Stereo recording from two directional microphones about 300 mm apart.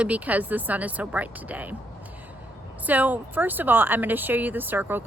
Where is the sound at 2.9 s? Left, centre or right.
Centre.